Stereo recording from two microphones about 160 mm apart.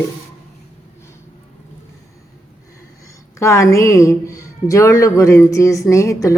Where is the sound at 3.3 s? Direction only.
20° left (ahead or behind).